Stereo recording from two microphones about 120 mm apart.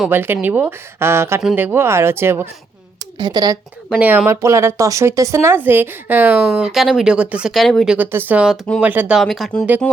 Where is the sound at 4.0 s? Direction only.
15° right (ahead or behind).